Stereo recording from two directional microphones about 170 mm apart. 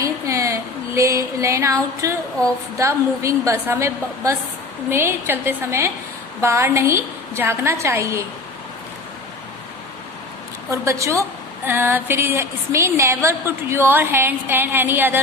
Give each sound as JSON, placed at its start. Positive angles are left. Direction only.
{"t": 0.0, "sound": "a sound", "side_deg": -20}
{"t": 2.4, "sound": "a woman's voice", "side_deg": -20}
{"t": 10.7, "sound": "a woman's voice", "side_deg": -15}